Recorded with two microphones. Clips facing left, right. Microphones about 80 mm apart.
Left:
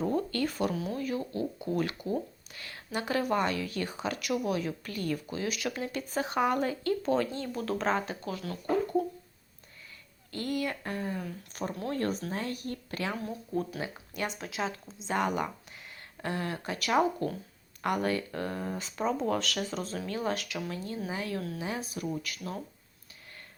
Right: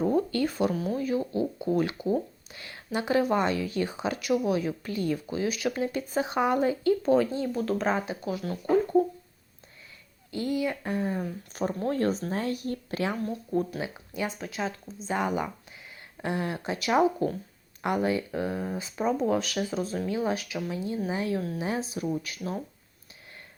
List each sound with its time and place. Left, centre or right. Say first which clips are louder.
0.0 s a sound: right 4 dB; centre
0.9 s speech: right 5 dB; centre
10.6 s speech: right 4 dB; centre
10.9 s speech: right 5 dB; right
13.1 s speech: right 5 dB; centre
16.2 s speech: right 4 dB; right